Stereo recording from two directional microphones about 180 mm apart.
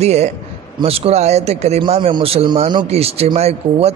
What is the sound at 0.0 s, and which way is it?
A man's voice, 35° right (ahead or behind).